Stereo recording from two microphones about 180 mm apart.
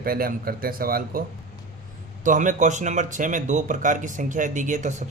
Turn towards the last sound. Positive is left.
turn(degrees=-45)  # may be behind; listen again after turning